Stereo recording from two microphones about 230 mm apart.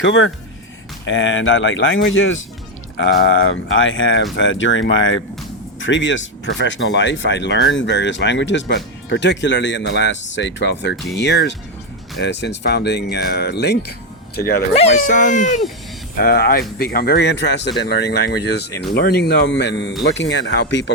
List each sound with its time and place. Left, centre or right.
0.0 s speech: left
14.8 s speech: left